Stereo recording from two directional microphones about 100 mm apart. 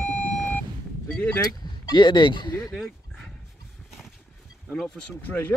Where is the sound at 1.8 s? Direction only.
45° left (ahead or behind).